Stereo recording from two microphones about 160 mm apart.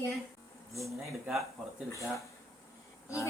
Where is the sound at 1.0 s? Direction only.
Centre (ahead or behind).